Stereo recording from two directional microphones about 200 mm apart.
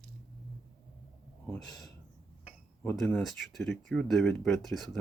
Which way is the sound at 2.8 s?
5° left (ahead or behind).